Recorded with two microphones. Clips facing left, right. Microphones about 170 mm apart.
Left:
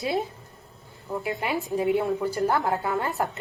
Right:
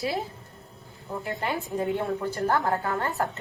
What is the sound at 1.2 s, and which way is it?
A woman's voice, 10° left (ahead or behind).